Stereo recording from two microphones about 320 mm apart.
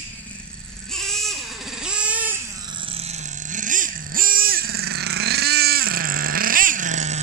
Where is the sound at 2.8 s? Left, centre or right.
Centre.